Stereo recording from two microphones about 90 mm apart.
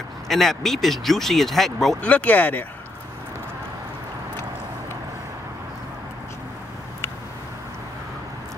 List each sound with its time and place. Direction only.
0.3 s speech: 5° left (ahead or behind)
2.0 s speech: 15° left (ahead or behind)